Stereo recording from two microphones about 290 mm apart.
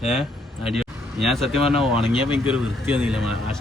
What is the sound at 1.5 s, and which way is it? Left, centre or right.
Speech, centre.